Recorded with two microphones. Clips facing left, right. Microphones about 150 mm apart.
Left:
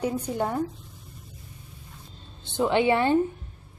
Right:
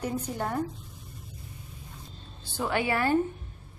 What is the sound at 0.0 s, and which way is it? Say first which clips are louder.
Speech: left 4 dB; 10° left (ahead or behind).